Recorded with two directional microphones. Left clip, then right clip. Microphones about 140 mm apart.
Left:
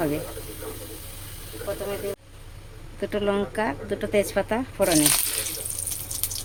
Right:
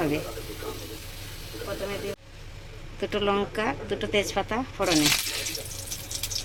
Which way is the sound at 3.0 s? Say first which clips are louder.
Left 1 dB; 25° left (ahead or behind).